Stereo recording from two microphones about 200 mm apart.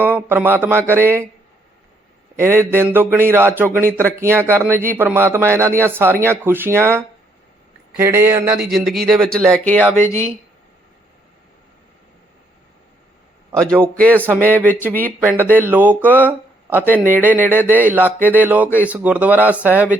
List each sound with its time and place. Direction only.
0.0 s speech: 10° right (ahead or behind)
2.4 s speech: 10° right (ahead or behind); by 10.2 s 15° left (ahead or behind)
13.8 s speech: 5° left (ahead or behind)
14.1 s speech: 10° right (ahead or behind)
14.4 s speech: 10° left (ahead or behind)
15.2 s speech: 10° right (ahead or behind)